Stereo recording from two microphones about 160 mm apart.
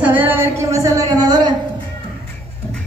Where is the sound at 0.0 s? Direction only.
10° right (ahead or behind).